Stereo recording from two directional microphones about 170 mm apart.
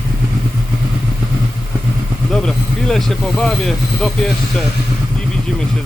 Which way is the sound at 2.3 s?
5° left (ahead or behind).